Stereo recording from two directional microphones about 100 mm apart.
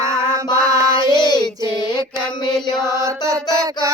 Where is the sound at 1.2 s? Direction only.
45° left (ahead or behind).